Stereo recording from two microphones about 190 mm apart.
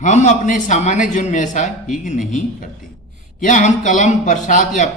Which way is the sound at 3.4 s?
40° left (ahead or behind).